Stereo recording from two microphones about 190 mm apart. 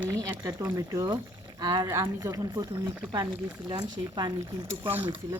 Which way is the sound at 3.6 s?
20° right (ahead or behind).